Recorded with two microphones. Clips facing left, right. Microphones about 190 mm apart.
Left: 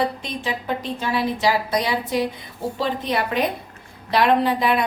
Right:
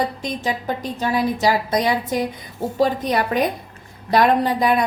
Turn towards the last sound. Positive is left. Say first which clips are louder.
# right 1 dB
turn(degrees=-45)  # may be behind; listen again after turning